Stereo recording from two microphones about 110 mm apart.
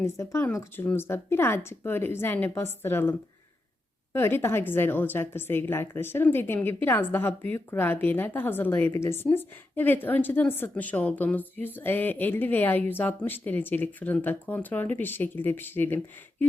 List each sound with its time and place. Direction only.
0.0 s a woman's voice: 25° left (ahead or behind)